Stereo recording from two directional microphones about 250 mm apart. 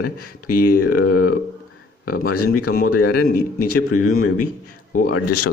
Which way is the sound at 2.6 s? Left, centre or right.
Left.